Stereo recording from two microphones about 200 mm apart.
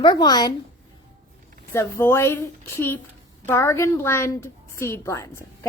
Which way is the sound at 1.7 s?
10° left (ahead or behind).